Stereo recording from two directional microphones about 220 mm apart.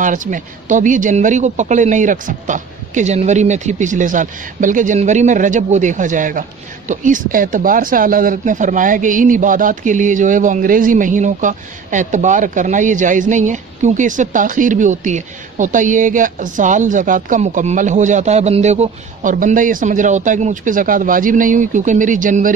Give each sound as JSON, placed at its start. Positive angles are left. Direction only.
{"t": 0.0, "sound": "speech", "side_deg": -35}